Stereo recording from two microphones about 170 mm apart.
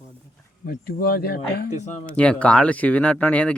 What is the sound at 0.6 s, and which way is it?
Speech, 60° left (ahead or behind).